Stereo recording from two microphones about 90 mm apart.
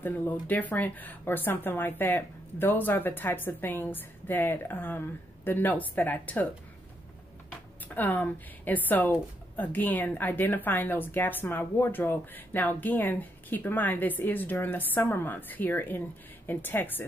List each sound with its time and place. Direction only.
0.0 s speech: 20° left (ahead or behind)
7.9 s speech: 20° left (ahead or behind)